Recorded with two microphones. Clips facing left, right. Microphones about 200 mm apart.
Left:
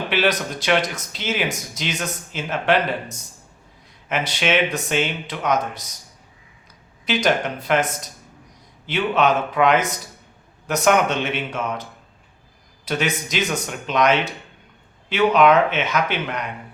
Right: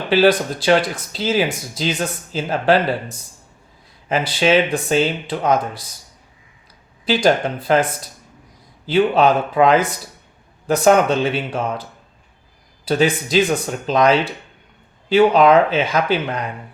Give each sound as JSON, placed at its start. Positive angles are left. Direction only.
{"t": 0.1, "sound": "speech", "side_deg": -30}
{"t": 7.0, "sound": "speech", "side_deg": -30}